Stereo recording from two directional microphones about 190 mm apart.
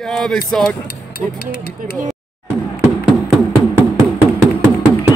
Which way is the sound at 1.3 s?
55° left (ahead or behind).